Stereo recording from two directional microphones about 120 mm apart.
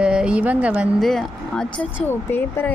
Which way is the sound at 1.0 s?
5° left (ahead or behind).